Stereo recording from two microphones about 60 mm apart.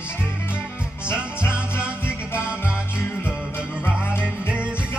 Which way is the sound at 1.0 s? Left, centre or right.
Left.